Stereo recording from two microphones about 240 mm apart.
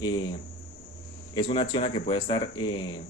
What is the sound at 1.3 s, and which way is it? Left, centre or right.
Speech, left.